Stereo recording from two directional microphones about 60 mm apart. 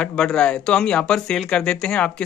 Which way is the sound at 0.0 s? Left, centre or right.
Centre.